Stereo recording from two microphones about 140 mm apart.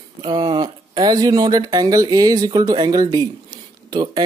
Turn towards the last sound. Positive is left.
turn(degrees=-30)  # may be behind; listen again after turning